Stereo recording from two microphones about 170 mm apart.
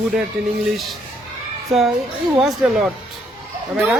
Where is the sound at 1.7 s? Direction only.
Centre (ahead or behind).